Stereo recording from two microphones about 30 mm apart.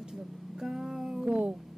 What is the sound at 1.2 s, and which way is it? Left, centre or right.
Music, right.